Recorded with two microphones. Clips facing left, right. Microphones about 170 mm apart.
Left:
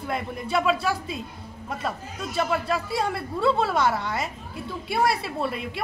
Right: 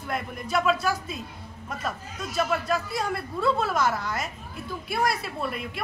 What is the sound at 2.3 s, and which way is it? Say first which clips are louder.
Speech: left 1 dB; 30° left (ahead or behind).